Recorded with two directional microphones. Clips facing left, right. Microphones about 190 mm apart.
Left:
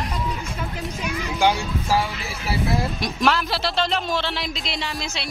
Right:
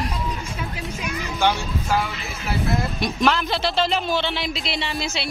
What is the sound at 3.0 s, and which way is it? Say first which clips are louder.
Speech: right 3 dB; centre (ahead or behind).